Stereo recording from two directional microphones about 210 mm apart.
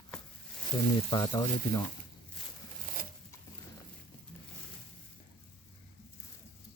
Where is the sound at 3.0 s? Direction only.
45° right (ahead or behind).